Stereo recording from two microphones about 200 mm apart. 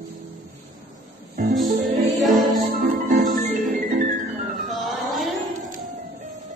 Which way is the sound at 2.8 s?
45° right (ahead or behind).